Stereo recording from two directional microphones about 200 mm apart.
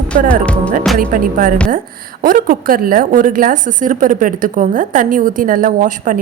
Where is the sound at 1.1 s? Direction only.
45° right (ahead or behind).